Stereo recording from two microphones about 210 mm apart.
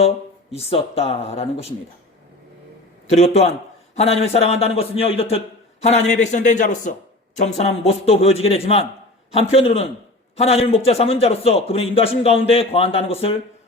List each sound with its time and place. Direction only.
0.5 s speech: 30° left (ahead or behind)
3.1 s a man's voice: 30° left (ahead or behind)